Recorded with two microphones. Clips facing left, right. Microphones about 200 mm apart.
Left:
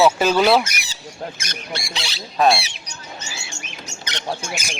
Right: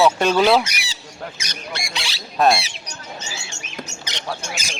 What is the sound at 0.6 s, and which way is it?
Squawk, 45° left (ahead or behind).